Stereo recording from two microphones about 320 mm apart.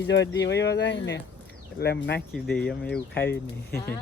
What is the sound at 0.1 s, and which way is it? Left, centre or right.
Speech, left.